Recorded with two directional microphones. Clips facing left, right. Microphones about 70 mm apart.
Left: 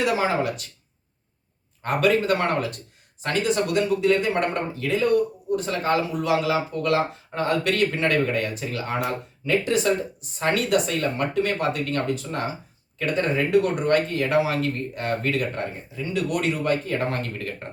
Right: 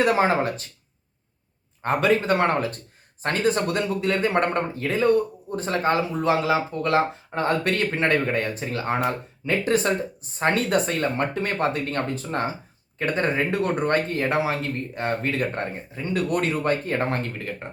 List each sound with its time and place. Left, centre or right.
0.0 s a man's voice: right
1.8 s a man's voice: right